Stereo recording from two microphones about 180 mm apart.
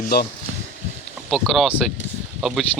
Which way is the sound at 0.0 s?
60° left (ahead or behind).